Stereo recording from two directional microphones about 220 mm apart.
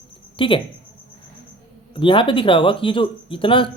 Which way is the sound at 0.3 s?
25° left (ahead or behind).